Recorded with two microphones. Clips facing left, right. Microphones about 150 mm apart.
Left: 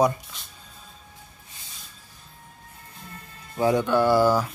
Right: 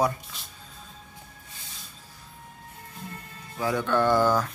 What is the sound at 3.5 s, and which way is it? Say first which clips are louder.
Speech: left 4 dB; 20° left (ahead or behind).